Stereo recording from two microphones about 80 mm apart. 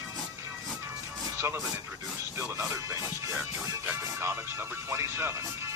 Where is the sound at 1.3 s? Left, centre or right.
Right.